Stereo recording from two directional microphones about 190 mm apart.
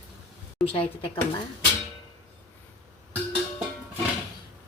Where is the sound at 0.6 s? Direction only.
30° left (ahead or behind).